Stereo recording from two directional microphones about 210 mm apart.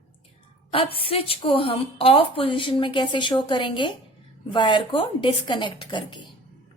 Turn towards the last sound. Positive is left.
turn(degrees=20)  # may be behind; listen again after turning